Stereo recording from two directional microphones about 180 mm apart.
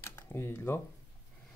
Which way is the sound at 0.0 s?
15° left (ahead or behind).